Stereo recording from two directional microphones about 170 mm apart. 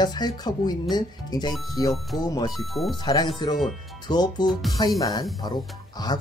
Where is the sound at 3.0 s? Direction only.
25° left (ahead or behind).